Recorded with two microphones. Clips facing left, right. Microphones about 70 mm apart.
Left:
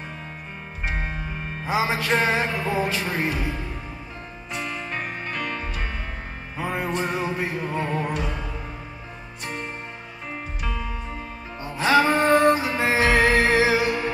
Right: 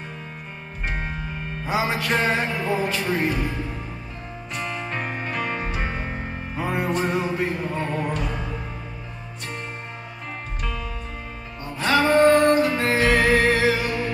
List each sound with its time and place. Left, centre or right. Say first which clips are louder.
0.8 s music: even; centre
4.6 s music: right 1 dB; centre; by 6.1 s right
6.5 s music: right 2 dB; centre
10.6 s music: even; centre